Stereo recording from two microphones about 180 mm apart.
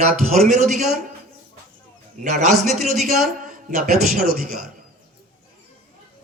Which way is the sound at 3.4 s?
55° right (ahead or behind).